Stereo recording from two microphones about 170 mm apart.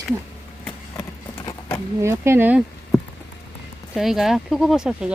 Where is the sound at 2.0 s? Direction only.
15° right (ahead or behind).